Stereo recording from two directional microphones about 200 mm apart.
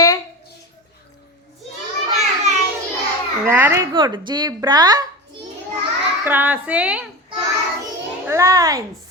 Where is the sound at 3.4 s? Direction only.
10° right (ahead or behind).